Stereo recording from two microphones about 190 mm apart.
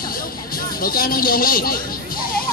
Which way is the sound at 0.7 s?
50° left (ahead or behind).